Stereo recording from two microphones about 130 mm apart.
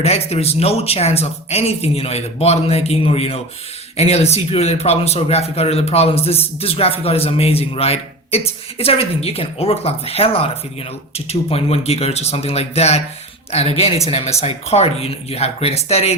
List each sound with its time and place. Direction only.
0.0 s speech: 55° left (ahead or behind)